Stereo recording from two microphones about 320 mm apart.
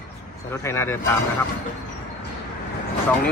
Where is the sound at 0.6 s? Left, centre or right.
Centre.